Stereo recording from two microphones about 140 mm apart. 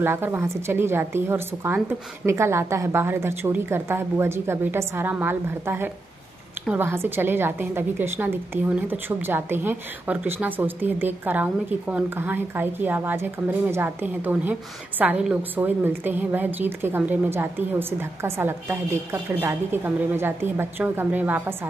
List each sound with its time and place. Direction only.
0.0 s a woman's voice: 15° right (ahead or behind)